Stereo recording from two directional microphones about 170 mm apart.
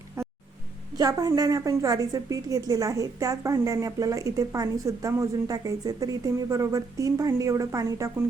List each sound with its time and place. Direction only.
0.9 s a woman's voice: 25° right (ahead or behind)